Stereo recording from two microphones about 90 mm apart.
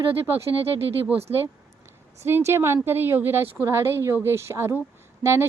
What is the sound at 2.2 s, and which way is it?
Speech, 30° right (ahead or behind).